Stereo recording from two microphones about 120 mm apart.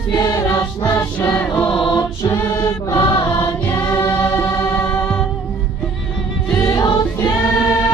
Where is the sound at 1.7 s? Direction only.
40° left (ahead or behind).